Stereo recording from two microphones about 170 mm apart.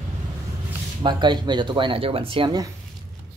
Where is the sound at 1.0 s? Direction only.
25° right (ahead or behind).